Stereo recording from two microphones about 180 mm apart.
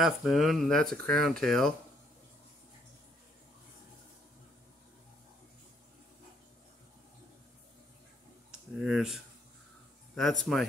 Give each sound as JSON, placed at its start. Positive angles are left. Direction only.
{"t": 0.0, "sound": "speech", "side_deg": 0}
{"t": 8.5, "sound": "a sound", "side_deg": -5}
{"t": 10.1, "sound": "speech", "side_deg": 0}